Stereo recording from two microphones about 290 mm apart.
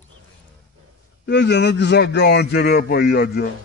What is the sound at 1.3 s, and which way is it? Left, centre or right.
A man's voice, left.